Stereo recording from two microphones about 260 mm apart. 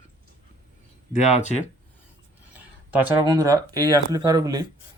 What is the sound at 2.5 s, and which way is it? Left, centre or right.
Speech, centre.